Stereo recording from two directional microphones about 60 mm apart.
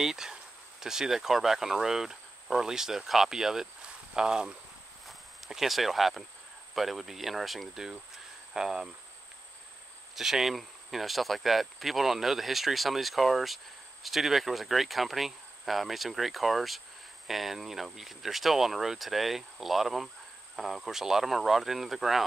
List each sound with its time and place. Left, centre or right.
0.0 s speech: centre
8.5 s cricket: centre
10.1 s speech: centre